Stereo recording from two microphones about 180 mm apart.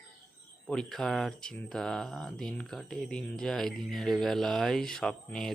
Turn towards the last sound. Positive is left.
turn(degrees=0)  # may be behind; listen again after turning